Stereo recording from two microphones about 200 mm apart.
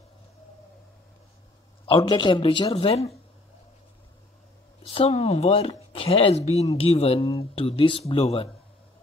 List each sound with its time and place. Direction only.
1.9 s speech: 25° left (ahead or behind)
4.8 s speech: 30° left (ahead or behind)